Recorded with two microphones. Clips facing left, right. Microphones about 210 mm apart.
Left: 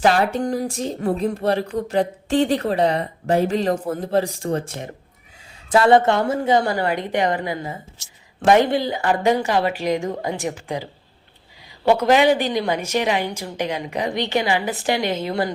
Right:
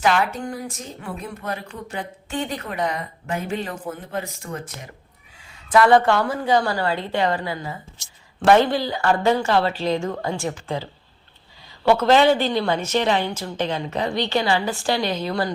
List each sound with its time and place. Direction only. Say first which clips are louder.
0.0 s a woman's voice: left 3 dB; 40° left (ahead or behind); by 10.8 s 15° left (ahead or behind)
11.9 s a woman's voice: even; 15° left (ahead or behind)